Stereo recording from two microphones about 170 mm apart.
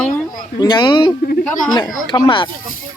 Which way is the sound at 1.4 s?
5° left (ahead or behind).